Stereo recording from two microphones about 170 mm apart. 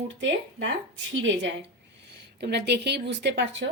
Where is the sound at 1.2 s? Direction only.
90° right.